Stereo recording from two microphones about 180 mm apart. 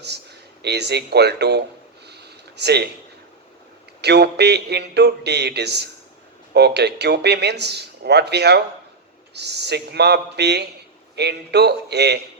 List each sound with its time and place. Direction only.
0.6 s speech: 65° right (ahead or behind)
4.0 s speech: 65° right (ahead or behind)